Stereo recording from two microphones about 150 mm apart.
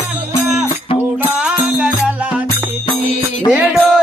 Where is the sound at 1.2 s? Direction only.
5° right (ahead or behind).